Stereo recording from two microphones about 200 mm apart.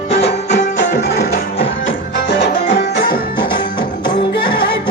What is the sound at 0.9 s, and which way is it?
Music, 60° left (ahead or behind).